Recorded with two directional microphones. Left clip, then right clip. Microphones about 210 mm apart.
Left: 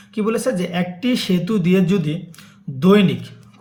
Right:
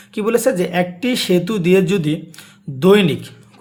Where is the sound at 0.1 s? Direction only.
45° right (ahead or behind).